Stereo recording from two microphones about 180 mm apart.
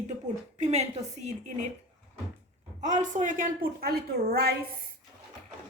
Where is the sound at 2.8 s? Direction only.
45° right (ahead or behind).